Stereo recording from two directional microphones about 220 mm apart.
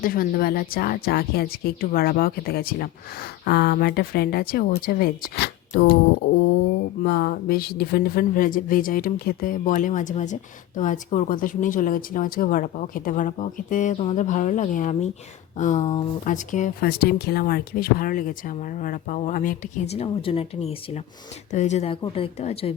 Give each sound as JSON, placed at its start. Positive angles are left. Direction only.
{"t": 0.0, "sound": "speech", "side_deg": 40}